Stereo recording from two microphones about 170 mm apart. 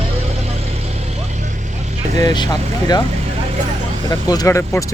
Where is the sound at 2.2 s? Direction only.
25° left (ahead or behind).